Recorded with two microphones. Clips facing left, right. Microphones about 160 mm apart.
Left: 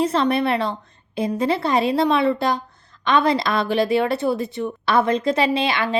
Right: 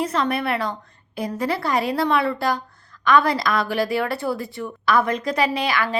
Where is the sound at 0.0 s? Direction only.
30° left (ahead or behind).